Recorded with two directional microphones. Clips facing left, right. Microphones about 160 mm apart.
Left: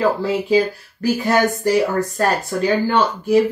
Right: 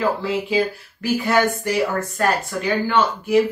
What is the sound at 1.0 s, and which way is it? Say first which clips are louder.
Speech: left 2 dB; 35° left (ahead or behind).